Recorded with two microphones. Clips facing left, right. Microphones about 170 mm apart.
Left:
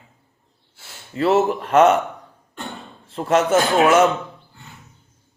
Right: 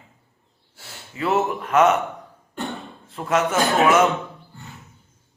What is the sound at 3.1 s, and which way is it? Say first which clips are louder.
Speech: left 4 dB; 30° left (ahead or behind).